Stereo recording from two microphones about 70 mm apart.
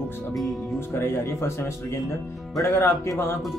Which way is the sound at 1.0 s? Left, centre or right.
Left.